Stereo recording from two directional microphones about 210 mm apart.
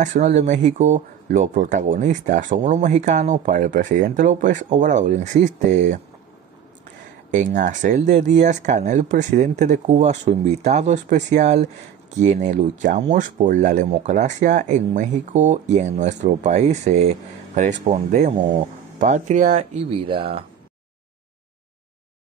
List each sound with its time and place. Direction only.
0.0 s speech: 35° right (ahead or behind)
7.2 s speech: 35° right (ahead or behind)